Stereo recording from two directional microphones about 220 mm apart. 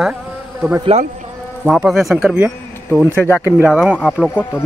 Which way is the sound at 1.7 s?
Centre (ahead or behind).